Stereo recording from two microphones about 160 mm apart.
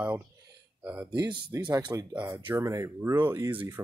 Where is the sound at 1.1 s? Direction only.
25° right (ahead or behind).